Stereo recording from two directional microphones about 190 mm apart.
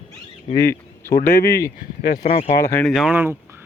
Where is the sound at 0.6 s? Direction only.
15° left (ahead or behind).